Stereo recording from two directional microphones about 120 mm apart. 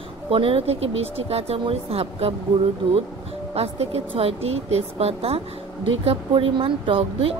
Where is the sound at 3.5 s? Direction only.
60° right (ahead or behind).